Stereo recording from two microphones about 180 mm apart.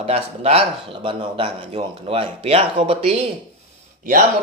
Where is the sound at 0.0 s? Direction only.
35° right (ahead or behind).